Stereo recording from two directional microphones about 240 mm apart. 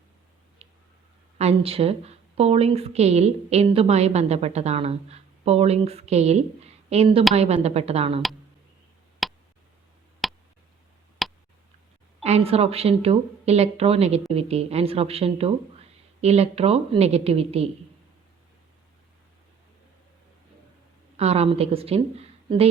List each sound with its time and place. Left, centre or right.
1.4 s a woman's voice: right
9.2 s a sound: centre
12.2 s a woman's voice: right
21.2 s a woman's voice: right